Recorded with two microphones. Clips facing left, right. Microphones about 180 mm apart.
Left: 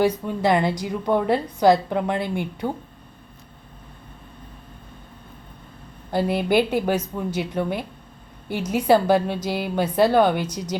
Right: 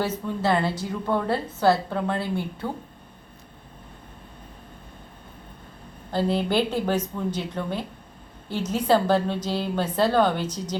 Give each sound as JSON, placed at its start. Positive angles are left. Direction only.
{"t": 0.0, "sound": "a woman's voice", "side_deg": 15}
{"t": 6.1, "sound": "a woman's voice", "side_deg": 10}